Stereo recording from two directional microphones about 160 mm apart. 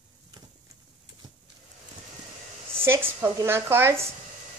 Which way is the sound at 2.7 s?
15° right (ahead or behind).